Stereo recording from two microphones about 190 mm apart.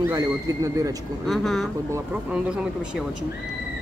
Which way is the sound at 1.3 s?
Centre (ahead or behind).